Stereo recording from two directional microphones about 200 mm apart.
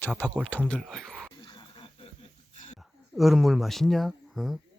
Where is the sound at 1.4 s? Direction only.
20° left (ahead or behind).